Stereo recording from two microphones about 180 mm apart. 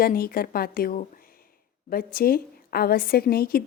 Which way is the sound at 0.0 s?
55° left (ahead or behind).